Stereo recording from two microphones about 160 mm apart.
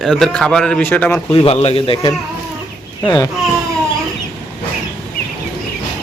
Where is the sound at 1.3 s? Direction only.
35° left (ahead or behind).